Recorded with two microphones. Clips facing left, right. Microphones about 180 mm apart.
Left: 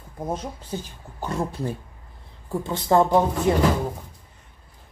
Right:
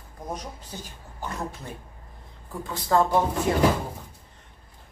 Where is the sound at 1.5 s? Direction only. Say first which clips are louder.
Left 10 dB; 35° left (ahead or behind).